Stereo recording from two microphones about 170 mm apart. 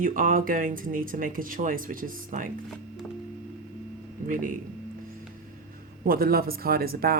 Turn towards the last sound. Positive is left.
turn(degrees=-60)  # may be behind; listen again after turning